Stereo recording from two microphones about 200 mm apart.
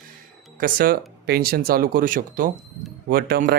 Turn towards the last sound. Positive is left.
turn(degrees=-50)  # may be behind; listen again after turning